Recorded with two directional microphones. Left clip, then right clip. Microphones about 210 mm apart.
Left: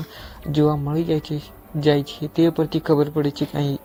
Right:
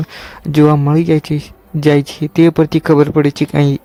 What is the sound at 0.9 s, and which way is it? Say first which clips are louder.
Speech: right 9 dB; 90° right.